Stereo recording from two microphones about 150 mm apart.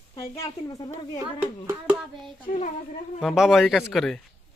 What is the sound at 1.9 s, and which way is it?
A man's voice, 5° right (ahead or behind).